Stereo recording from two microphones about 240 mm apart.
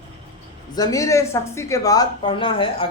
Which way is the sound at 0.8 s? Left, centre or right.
Centre.